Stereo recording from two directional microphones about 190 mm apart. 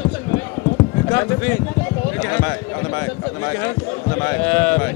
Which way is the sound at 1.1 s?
10° left (ahead or behind).